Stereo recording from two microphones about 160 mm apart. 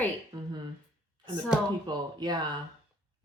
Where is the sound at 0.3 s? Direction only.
25° right (ahead or behind).